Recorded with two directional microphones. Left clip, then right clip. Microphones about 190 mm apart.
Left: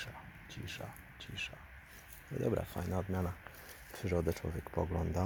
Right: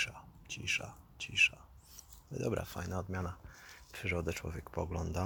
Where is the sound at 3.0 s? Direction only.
Centre (ahead or behind).